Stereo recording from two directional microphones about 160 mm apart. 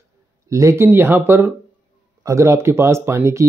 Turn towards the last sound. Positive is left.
turn(degrees=-15)  # may be behind; listen again after turning